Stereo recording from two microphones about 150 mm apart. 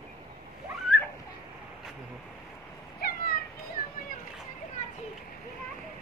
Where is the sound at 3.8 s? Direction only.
75° left (ahead or behind).